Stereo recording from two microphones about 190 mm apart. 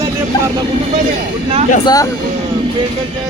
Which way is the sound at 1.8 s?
20° left (ahead or behind).